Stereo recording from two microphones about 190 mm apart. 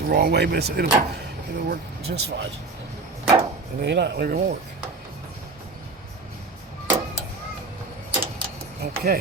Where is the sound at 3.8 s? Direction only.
60° right (ahead or behind).